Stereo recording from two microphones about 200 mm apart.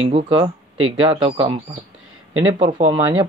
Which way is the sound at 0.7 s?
90° right.